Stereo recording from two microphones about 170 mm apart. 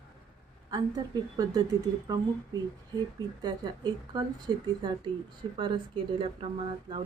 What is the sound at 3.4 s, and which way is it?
Speech, 25° right (ahead or behind).